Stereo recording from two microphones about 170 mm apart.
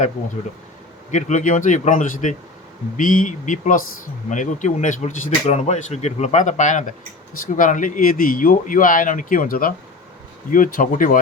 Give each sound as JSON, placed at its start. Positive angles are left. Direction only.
{"t": 1.1, "sound": "speech", "side_deg": 45}